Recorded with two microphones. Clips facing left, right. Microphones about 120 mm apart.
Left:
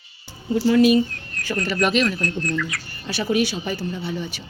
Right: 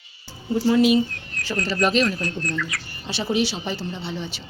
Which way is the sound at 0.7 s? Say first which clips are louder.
Left 2 dB; 25° right (ahead or behind).